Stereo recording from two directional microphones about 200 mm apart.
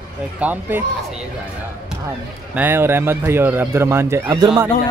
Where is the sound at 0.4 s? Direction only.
10° right (ahead or behind).